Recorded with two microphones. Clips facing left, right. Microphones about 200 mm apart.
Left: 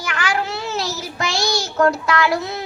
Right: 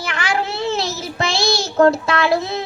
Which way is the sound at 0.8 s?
25° right (ahead or behind).